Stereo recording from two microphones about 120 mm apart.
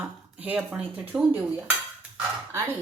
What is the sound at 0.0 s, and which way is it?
Speech, 10° right (ahead or behind).